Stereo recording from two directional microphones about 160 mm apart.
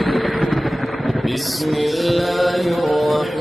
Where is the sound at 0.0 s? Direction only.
Centre (ahead or behind).